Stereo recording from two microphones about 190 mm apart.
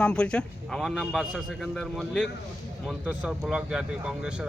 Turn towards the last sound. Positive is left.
turn(degrees=-5)  # may be behind; listen again after turning